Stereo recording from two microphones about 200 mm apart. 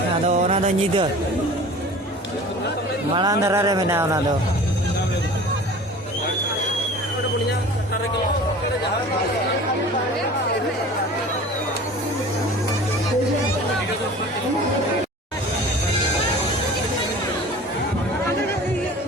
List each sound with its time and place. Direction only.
0.3 s speech: 35° right (ahead or behind)
3.2 s speech: 15° right (ahead or behind)